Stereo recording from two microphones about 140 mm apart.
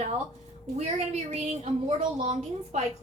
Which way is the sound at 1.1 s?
50° right (ahead or behind).